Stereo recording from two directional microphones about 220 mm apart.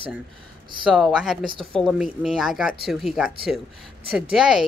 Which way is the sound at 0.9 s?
Centre (ahead or behind).